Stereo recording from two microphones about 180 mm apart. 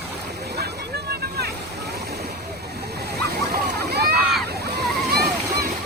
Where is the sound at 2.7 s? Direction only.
65° right (ahead or behind).